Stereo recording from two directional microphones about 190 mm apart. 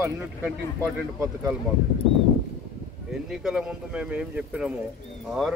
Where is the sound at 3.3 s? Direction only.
5° right (ahead or behind).